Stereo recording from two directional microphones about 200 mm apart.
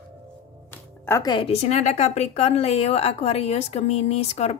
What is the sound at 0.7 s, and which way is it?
Speech, 15° left (ahead or behind).